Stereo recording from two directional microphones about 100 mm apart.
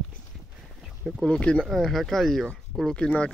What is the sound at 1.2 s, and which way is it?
Speech, 5° left (ahead or behind).